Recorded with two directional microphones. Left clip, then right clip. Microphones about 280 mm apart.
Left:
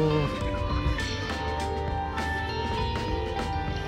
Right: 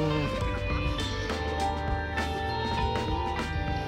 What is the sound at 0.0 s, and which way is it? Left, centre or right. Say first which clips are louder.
Music: left 3 dB; centre.